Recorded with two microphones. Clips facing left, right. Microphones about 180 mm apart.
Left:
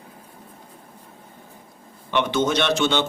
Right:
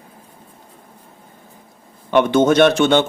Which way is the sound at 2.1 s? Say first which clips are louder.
Right 8 dB; 50° right (ahead or behind).